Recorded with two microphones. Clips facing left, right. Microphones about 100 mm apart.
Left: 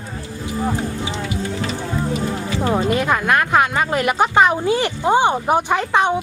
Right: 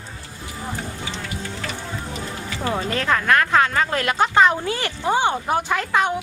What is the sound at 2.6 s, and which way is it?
Speech, 15° left (ahead or behind).